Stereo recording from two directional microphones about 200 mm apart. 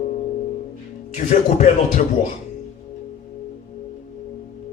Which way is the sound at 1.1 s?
35° left (ahead or behind).